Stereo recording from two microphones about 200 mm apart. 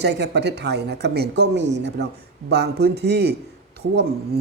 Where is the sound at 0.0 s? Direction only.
60° right (ahead or behind).